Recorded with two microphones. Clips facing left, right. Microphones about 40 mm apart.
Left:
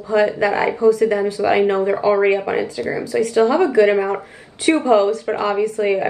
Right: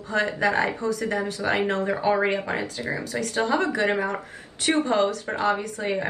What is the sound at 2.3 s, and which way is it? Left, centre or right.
A woman's voice, left.